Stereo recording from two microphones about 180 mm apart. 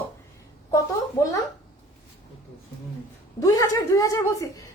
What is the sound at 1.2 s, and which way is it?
Speech, 15° left (ahead or behind).